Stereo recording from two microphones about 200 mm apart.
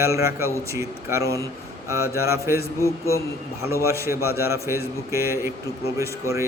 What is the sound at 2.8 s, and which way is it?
Speech, 15° left (ahead or behind).